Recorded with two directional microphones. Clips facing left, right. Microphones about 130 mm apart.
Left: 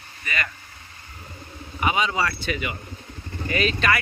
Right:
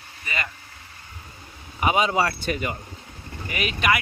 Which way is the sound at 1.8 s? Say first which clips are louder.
Right 2 dB; 40° right (ahead or behind).